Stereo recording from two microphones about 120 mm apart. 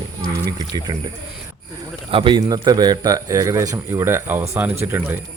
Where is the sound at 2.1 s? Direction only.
50° right (ahead or behind).